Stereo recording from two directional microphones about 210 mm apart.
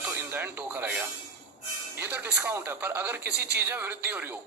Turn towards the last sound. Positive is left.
turn(degrees=-10)  # may be behind; listen again after turning